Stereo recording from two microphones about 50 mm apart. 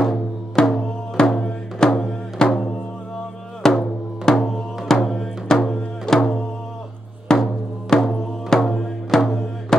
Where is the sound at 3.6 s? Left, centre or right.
Centre.